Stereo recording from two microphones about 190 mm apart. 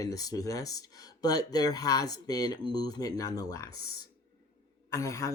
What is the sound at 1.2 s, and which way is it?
Speech, 20° left (ahead or behind).